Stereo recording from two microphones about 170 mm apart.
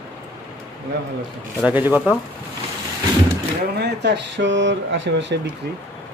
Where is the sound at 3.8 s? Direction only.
80° right.